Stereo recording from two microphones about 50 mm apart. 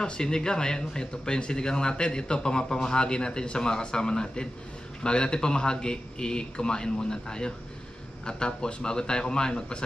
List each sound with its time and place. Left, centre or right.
0.0 s speech: centre